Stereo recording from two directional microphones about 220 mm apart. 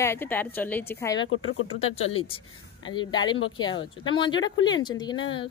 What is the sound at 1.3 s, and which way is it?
Speech, 65° left (ahead or behind).